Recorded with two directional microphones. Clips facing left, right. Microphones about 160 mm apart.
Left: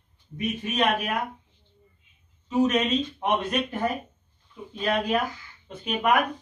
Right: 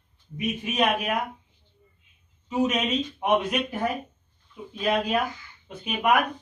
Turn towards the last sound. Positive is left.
turn(degrees=-5)  # may be behind; listen again after turning